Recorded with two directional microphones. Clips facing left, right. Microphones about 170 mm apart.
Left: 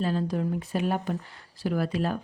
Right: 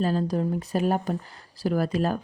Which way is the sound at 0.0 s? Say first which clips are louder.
Right 3 dB; 40° right (ahead or behind).